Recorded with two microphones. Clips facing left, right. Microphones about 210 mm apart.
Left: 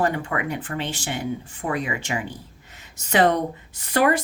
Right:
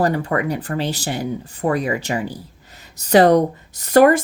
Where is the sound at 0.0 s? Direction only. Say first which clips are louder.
Right 5 dB; 40° right (ahead or behind).